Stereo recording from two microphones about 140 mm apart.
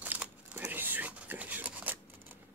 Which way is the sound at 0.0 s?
15° right (ahead or behind).